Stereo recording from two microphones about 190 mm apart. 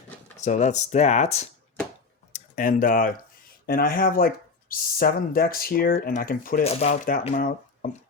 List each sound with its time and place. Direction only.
0.3 s speech: 40° left (ahead or behind)
6.7 s speech: 35° left (ahead or behind)